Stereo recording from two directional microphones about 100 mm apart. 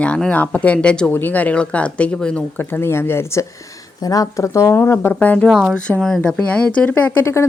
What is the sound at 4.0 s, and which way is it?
Speech, 40° left (ahead or behind).